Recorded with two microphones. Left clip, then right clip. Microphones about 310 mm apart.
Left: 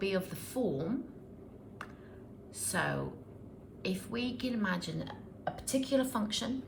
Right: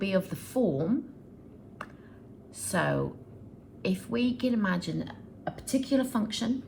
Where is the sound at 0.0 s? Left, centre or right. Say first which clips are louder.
Right 5 dB; centre.